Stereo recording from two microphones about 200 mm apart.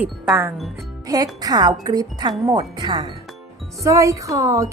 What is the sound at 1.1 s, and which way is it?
Speech, 20° right (ahead or behind).